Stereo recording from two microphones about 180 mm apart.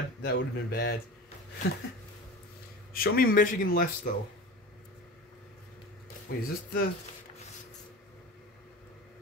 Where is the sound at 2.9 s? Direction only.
55° left (ahead or behind).